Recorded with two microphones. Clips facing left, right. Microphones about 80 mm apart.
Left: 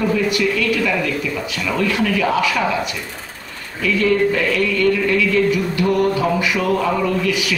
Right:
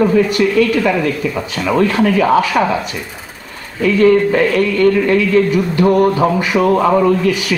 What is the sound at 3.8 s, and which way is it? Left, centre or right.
A man's voice, right.